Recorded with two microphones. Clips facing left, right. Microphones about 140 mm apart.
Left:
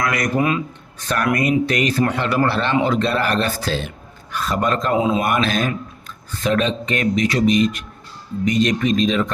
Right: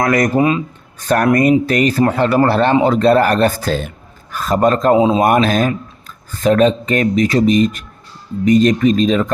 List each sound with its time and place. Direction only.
0.0 s speech: 40° right (ahead or behind)
0.3 s speech: 30° right (ahead or behind)
0.9 s a man's voice: 45° right (ahead or behind)
4.9 s speech: 25° right (ahead or behind)
5.2 s speech: 40° right (ahead or behind)